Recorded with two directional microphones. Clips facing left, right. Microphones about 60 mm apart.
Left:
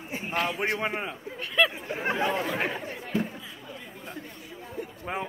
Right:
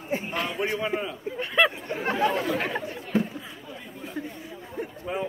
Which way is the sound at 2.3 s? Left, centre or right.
Left.